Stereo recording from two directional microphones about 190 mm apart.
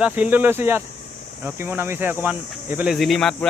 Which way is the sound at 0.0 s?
10° right (ahead or behind).